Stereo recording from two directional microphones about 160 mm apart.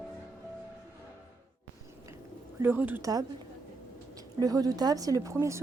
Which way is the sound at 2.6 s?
10° right (ahead or behind).